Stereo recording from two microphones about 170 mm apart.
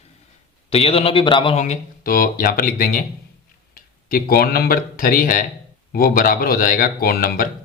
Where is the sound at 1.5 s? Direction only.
45° left (ahead or behind).